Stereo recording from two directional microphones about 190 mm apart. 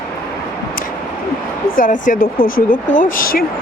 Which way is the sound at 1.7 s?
45° left (ahead or behind).